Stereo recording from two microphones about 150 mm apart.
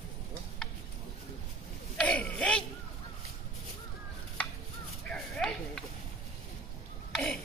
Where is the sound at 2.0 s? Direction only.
10° left (ahead or behind).